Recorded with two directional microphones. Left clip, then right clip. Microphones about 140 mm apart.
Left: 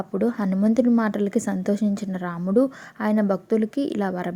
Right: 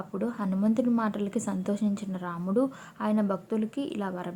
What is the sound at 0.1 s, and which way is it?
Speech, 50° left (ahead or behind).